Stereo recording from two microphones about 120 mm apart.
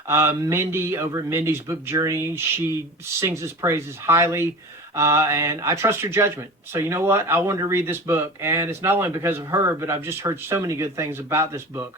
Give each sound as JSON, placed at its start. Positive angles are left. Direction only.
{"t": 0.1, "sound": "speech", "side_deg": -20}